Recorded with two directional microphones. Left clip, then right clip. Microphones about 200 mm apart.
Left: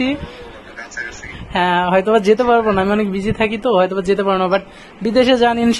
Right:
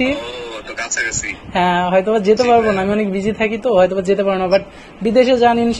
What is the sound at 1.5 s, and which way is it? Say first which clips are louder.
Speech: even; 15° left (ahead or behind).